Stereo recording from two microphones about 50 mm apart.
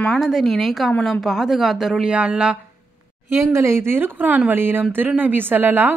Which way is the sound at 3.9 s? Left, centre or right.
Right.